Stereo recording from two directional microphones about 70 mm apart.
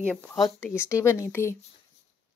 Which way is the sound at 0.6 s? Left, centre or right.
Left.